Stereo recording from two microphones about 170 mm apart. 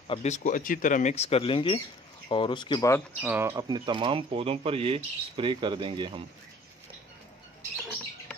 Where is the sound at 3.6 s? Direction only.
25° right (ahead or behind).